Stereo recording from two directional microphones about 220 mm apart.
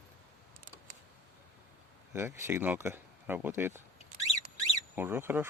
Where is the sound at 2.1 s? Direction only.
10° right (ahead or behind).